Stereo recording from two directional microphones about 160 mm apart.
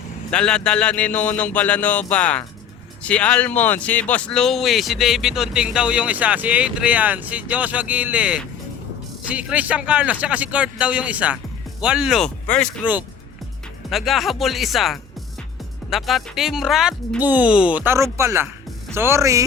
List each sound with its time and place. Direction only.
0.3 s speech: 5° left (ahead or behind); by 19.5 s 20° right (ahead or behind)